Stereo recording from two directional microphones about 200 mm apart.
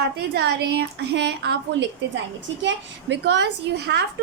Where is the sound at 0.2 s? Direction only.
55° right (ahead or behind).